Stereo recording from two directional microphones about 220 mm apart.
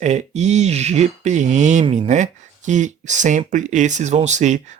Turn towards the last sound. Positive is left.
turn(degrees=-30)  # may be behind; listen again after turning